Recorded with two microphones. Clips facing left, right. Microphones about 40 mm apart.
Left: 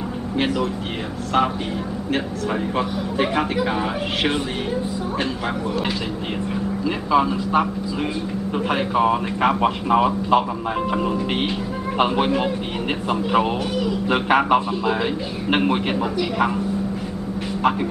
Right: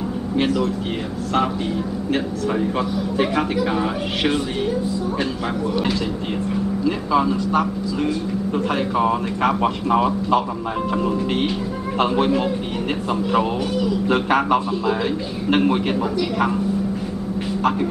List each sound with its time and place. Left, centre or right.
0.4 s speech: centre
7.1 s a man's voice: centre